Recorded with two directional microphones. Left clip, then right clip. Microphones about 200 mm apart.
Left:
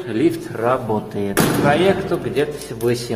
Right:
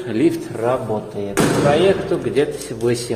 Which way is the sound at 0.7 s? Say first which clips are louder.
Left 1 dB; 15° left (ahead or behind).